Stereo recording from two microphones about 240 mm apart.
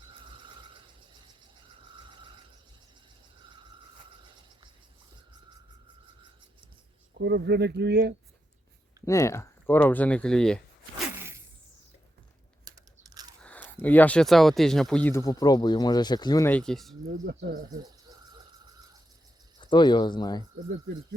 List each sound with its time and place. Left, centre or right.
0.1 s a sound: right
2.0 s mechanisms: centre
7.2 s speech: right
9.0 s speech: centre
11.2 s zipper: centre
12.6 s crunch: centre
13.4 s speech: centre
17.1 s speech: right
17.7 s a sound: centre
19.7 s speech: centre